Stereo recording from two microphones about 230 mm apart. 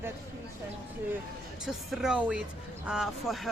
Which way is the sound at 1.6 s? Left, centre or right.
Centre.